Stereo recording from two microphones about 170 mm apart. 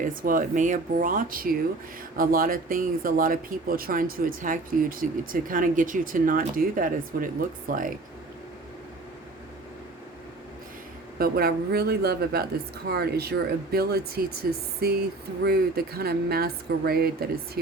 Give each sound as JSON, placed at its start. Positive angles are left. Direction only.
{"t": 0.0, "sound": "speech", "side_deg": -55}
{"t": 11.2, "sound": "speech", "side_deg": -65}